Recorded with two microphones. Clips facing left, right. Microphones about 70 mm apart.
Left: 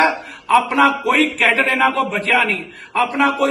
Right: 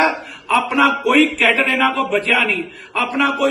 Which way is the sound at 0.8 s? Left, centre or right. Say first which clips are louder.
Right 1 dB; left.